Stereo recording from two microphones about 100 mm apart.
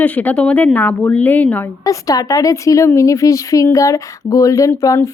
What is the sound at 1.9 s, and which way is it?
A woman's voice, 35° left (ahead or behind).